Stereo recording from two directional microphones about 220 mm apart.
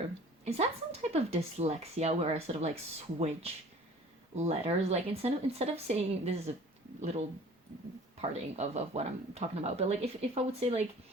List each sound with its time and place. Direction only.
0.4 s speech: 30° right (ahead or behind)